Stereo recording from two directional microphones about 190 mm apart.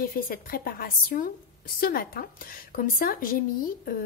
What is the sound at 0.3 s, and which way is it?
A woman's voice, 50° left (ahead or behind).